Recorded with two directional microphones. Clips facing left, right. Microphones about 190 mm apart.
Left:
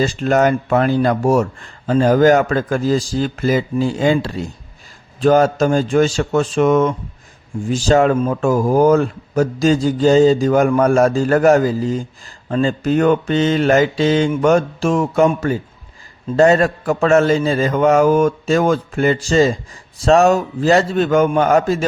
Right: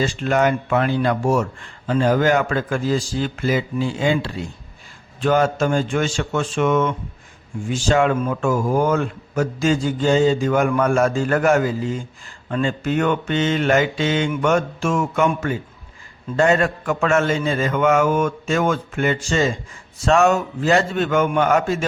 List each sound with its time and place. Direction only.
0.0 s speech: 40° left (ahead or behind)